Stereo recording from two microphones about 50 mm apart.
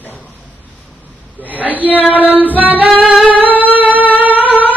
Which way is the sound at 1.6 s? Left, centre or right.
Right.